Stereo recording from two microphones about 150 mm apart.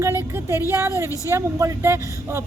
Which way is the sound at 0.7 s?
20° right (ahead or behind).